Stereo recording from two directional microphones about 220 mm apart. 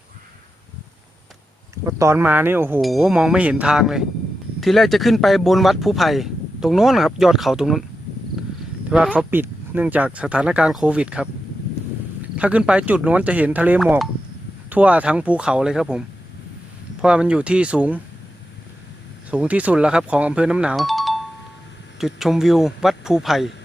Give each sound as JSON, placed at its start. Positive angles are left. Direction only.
{"t": 1.7, "sound": "speech", "side_deg": -15}
{"t": 8.9, "sound": "speech", "side_deg": -5}
{"t": 12.4, "sound": "speech", "side_deg": -5}
{"t": 19.3, "sound": "speech", "side_deg": -5}